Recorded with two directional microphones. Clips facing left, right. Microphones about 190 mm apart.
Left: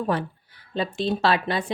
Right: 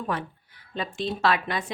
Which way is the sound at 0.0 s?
35° left (ahead or behind).